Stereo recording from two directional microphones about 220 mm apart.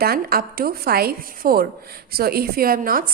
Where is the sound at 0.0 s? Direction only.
45° right (ahead or behind).